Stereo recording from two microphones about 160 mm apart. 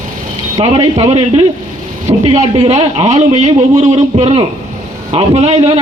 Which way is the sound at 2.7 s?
45° right (ahead or behind).